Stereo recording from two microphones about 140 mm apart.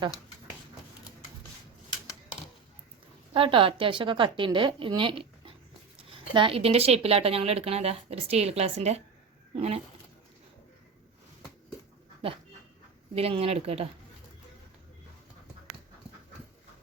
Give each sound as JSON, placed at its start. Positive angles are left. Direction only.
{"t": 3.3, "sound": "a woman's voice", "side_deg": -40}
{"t": 13.1, "sound": "speech", "side_deg": -45}